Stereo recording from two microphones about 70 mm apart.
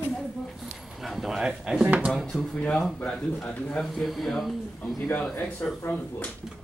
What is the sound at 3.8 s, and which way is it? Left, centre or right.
Speech, centre.